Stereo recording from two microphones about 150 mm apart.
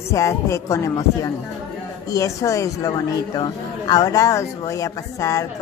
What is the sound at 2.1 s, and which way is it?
A woman's voice, 20° left (ahead or behind).